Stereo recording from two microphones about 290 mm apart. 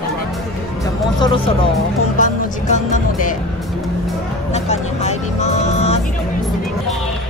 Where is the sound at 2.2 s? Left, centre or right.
Left.